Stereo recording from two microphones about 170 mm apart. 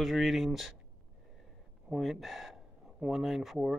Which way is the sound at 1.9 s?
Centre (ahead or behind).